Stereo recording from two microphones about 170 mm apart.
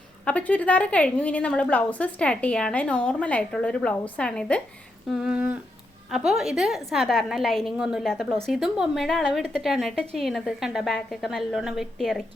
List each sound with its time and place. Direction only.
0.3 s a woman's voice: 10° left (ahead or behind)